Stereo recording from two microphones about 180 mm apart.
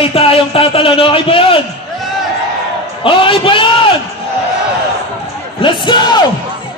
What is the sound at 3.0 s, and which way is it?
Speech, 30° left (ahead or behind).